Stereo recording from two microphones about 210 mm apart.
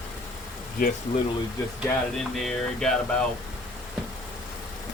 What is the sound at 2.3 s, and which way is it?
Speech, centre (ahead or behind).